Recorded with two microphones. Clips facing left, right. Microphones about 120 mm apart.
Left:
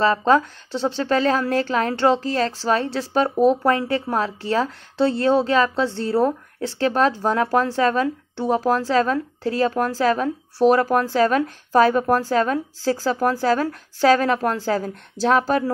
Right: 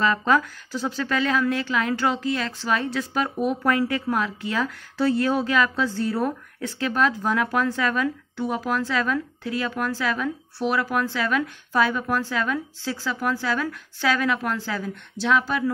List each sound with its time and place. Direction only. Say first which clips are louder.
0.0 s a woman's voice: left 4 dB; 30° left (ahead or behind)